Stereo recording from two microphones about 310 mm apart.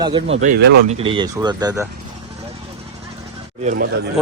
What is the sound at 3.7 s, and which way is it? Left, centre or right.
Speech, right.